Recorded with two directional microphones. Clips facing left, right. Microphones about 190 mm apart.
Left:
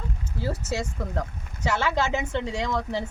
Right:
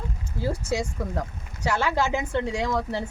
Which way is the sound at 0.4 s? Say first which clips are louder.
Right 2 dB; 10° right (ahead or behind).